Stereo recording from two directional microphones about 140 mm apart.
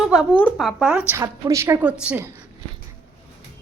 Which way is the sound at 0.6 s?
5° right (ahead or behind).